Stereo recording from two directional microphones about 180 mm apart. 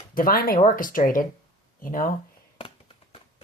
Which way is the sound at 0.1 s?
50° left (ahead or behind).